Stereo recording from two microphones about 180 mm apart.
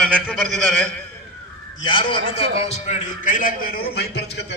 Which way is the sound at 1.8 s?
30° left (ahead or behind).